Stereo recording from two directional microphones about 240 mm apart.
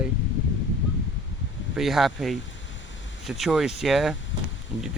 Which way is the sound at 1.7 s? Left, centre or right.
Centre.